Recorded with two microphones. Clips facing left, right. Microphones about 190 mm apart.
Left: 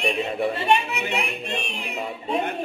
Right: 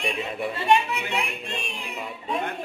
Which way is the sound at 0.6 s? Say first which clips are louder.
Even; 20° left (ahead or behind).